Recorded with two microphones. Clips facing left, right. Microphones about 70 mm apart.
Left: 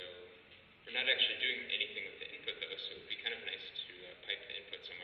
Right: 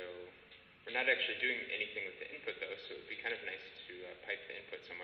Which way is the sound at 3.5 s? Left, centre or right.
Right.